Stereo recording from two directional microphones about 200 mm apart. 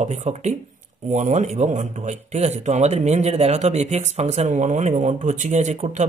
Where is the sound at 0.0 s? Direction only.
35° right (ahead or behind).